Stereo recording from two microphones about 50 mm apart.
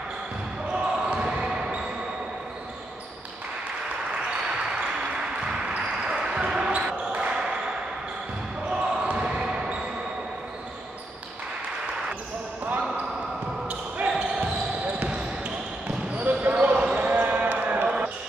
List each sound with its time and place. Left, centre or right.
0.7 s basketball bounce: right
5.1 s basketball bounce: centre
8.6 s basketball bounce: centre
13.7 s basketball bounce: right
14.1 s basketball bounce: centre
16.2 s basketball bounce: right
16.7 s basketball bounce: right
17.0 s basketball bounce: right
17.8 s basketball bounce: right